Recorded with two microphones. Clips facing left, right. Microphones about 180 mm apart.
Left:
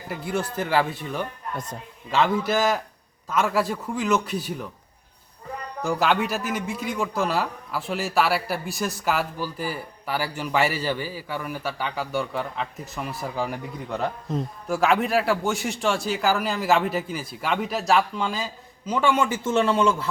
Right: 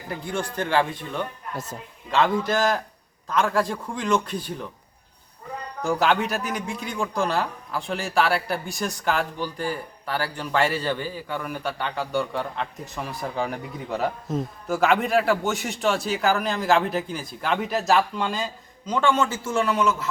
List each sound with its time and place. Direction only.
0.1 s speech: 5° left (ahead or behind)
5.8 s a man's voice: centre (ahead or behind)
19.5 s a man's voice: 25° left (ahead or behind)